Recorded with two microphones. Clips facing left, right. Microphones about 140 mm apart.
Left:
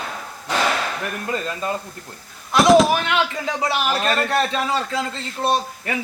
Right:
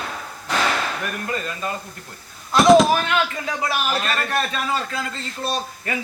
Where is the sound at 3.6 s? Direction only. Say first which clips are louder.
Left 2 dB; 25° left (ahead or behind).